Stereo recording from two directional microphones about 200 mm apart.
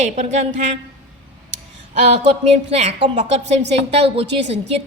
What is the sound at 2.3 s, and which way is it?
A woman's voice, 30° right (ahead or behind).